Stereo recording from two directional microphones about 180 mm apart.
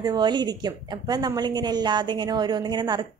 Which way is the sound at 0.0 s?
25° right (ahead or behind).